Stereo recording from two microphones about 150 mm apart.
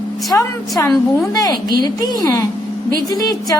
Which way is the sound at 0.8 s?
25° left (ahead or behind).